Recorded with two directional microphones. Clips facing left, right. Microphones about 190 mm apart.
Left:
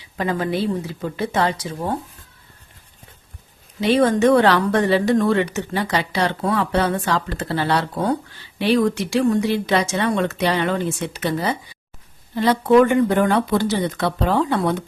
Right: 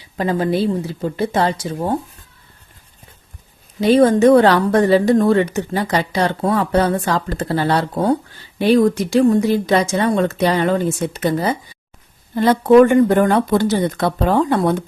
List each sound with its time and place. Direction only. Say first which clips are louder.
0.2 s speech: right 4 dB; 35° right (ahead or behind)
3.8 s speech: right 4 dB; 40° right (ahead or behind)